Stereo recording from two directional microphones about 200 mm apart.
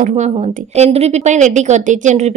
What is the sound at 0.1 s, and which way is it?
A woman's voice, 30° right (ahead or behind).